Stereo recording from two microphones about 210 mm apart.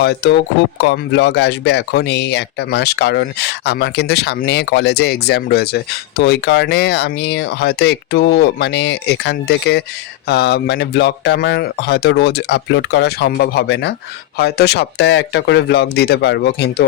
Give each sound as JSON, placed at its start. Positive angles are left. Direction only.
{"t": 0.0, "sound": "speech", "side_deg": 55}